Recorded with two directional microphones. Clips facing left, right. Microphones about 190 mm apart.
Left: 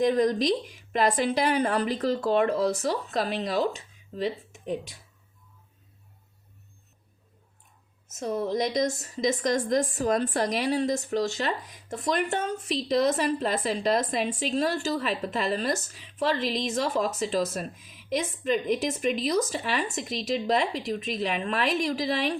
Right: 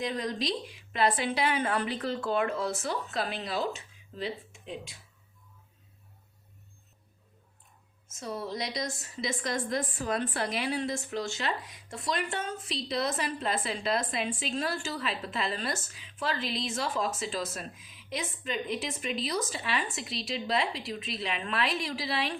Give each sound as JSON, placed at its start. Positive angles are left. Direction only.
{"t": 0.0, "sound": "a woman's voice", "side_deg": 45}
{"t": 8.2, "sound": "a woman's voice", "side_deg": 45}